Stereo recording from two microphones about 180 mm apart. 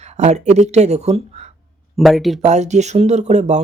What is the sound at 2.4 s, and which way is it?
Speech, 40° right (ahead or behind).